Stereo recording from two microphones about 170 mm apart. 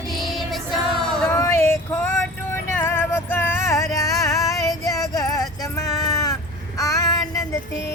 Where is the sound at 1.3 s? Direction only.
15° left (ahead or behind).